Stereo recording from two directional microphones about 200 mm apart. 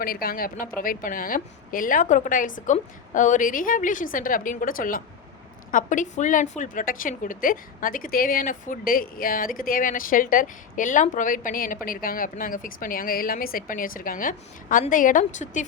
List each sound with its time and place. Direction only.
0.0 s a woman's voice: 45° left (ahead or behind)